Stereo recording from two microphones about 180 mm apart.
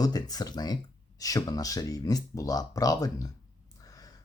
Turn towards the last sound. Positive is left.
turn(degrees=20)  # may be behind; listen again after turning